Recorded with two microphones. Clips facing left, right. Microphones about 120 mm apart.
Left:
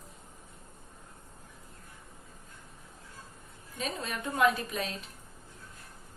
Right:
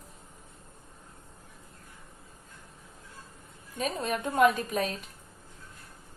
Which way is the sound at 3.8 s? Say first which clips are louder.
Right 5 dB; 45° right (ahead or behind).